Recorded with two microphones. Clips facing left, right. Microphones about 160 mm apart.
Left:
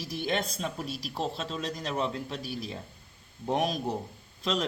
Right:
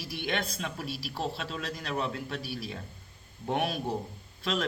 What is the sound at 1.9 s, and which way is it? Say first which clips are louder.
Speech: right 1 dB; 40° left (ahead or behind).